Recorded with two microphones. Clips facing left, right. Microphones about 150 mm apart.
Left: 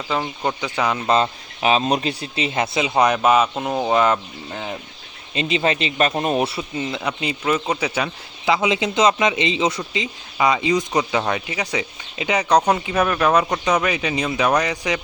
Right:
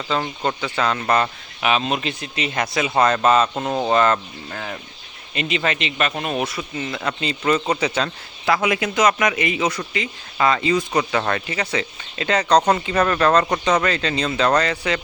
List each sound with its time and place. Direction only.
0.1 s a man's voice: 10° left (ahead or behind)
3.0 s speech: 10° left (ahead or behind)
5.3 s a man's voice: 25° left (ahead or behind)
7.1 s a man's voice: 10° left (ahead or behind)